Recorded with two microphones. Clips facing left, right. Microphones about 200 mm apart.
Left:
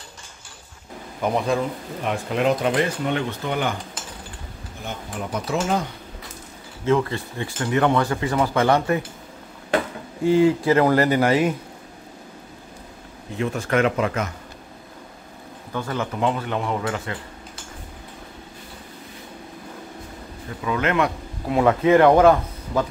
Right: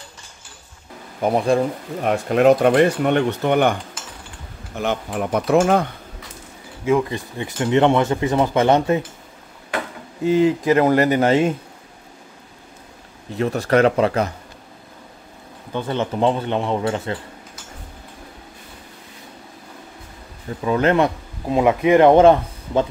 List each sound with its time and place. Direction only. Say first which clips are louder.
2.0 s speech: right 7 dB; 50° right (ahead or behind)
4.7 s speech: right 9 dB; 70° right (ahead or behind)
6.8 s speech: right 2 dB; 15° right (ahead or behind)
10.2 s speech: right 1 dB; 20° right (ahead or behind)
13.4 s speech: right 5 dB; 35° right (ahead or behind)
15.7 s speech: right 4 dB; 25° right (ahead or behind)
20.6 s speech: right 5 dB; 35° right (ahead or behind)